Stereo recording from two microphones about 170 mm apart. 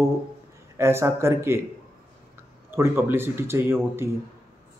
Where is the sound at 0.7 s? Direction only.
15° right (ahead or behind).